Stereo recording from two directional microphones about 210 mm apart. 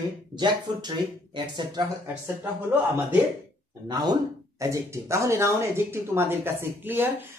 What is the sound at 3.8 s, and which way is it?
Speech, 20° right (ahead or behind).